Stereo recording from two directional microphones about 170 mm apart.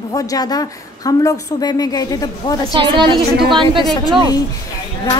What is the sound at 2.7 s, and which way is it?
A woman's voice, 30° right (ahead or behind).